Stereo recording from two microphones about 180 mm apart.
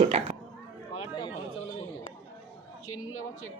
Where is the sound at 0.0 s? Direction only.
35° right (ahead or behind).